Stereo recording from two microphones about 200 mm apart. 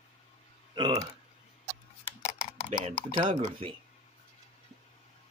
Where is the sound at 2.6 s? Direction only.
25° right (ahead or behind).